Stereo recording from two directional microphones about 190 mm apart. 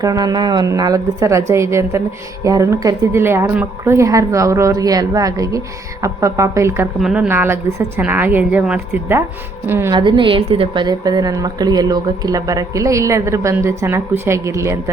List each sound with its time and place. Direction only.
0.0 s a woman's voice: 20° right (ahead or behind)
10.0 s a woman's voice: 25° right (ahead or behind)